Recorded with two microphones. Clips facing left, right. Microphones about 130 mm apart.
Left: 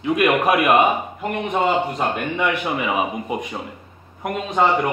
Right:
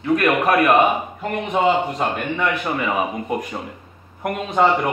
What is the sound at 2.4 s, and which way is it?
A man's voice, 5° left (ahead or behind).